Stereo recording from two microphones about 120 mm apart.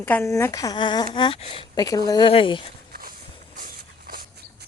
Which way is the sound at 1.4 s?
50° left (ahead or behind).